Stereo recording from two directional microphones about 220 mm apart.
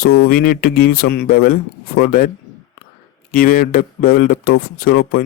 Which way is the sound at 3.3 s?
40° left (ahead or behind).